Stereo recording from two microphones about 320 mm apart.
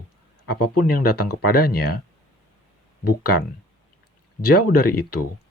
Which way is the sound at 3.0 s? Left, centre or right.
Left.